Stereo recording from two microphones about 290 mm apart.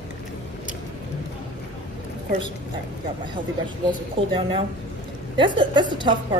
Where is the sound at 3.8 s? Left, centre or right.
Centre.